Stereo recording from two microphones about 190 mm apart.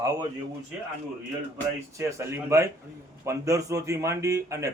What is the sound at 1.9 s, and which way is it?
Speech, 15° right (ahead or behind).